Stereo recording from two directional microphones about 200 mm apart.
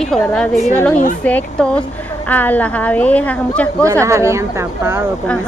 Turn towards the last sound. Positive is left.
turn(degrees=-10)  # may be behind; listen again after turning